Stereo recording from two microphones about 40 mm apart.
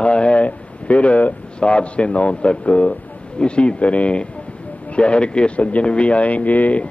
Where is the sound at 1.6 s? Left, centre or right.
Left.